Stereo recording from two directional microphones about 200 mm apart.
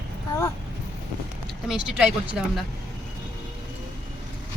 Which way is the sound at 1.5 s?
5° right (ahead or behind).